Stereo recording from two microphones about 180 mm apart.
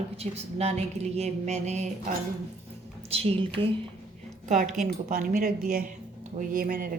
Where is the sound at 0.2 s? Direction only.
35° right (ahead or behind).